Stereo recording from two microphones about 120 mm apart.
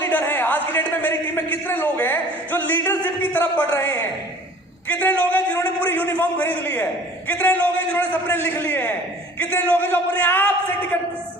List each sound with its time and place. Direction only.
0.0 s a man's voice: 15° left (ahead or behind)